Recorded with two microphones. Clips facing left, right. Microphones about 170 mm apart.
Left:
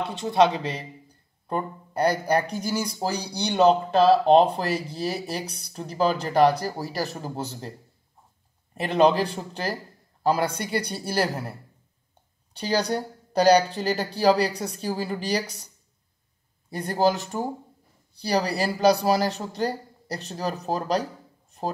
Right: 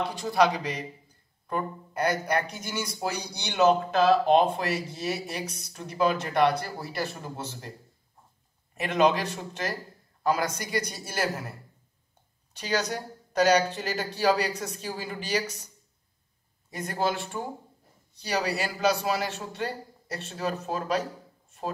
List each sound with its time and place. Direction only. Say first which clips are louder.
0.1 s speech: left 5 dB; 25° left (ahead or behind)
8.7 s speech: left 4 dB; 30° left (ahead or behind)
12.5 s speech: left 4 dB; 30° left (ahead or behind)
16.7 s speech: left 6 dB; 35° left (ahead or behind)